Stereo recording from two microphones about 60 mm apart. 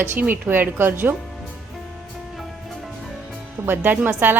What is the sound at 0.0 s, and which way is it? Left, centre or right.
Speech, right.